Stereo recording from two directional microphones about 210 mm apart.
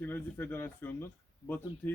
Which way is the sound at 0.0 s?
10° left (ahead or behind).